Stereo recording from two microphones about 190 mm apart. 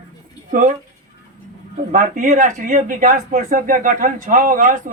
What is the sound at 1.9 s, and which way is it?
Speech, 40° right (ahead or behind).